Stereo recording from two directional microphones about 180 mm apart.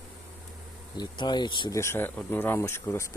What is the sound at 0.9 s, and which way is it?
Speech, 25° left (ahead or behind).